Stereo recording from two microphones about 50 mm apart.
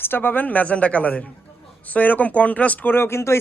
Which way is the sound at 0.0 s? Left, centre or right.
Left.